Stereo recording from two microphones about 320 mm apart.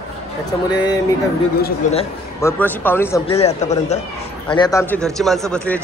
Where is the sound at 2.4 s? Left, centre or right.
Centre.